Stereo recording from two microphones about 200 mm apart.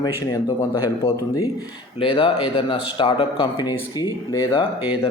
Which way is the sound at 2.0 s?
25° left (ahead or behind).